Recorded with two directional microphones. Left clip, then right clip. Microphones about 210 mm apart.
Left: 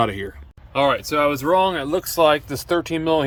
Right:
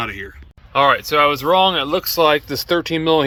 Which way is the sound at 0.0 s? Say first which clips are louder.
Left 4 dB; 25° left (ahead or behind).